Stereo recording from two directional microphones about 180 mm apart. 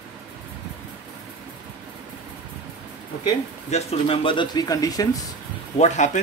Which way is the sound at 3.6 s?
35° left (ahead or behind).